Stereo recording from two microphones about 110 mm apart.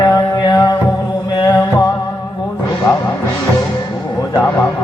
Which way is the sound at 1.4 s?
35° left (ahead or behind).